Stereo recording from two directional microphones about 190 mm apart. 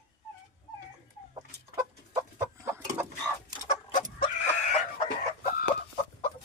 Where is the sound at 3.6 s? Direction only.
40° left (ahead or behind).